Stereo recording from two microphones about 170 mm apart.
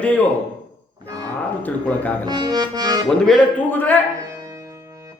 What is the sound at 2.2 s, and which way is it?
Music, 25° right (ahead or behind).